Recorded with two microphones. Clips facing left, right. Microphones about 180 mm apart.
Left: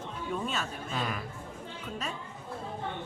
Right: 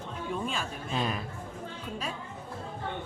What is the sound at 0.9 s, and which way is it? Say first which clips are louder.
Speech: right 4 dB; 25° right (ahead or behind).